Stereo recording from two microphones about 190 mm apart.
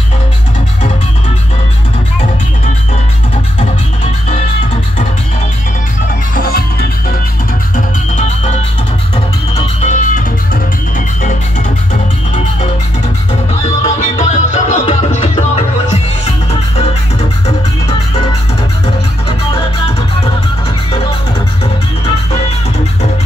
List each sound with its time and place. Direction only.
6.3 s music: 50° left (ahead or behind)
7.7 s music: 40° left (ahead or behind)
9.6 s music: 35° left (ahead or behind)
13.8 s music: 40° left (ahead or behind)